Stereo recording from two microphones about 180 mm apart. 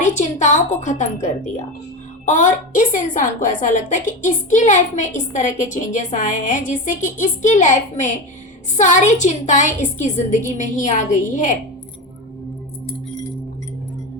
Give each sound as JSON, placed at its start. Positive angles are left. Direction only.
{"t": 0.0, "sound": "a woman's voice", "side_deg": 40}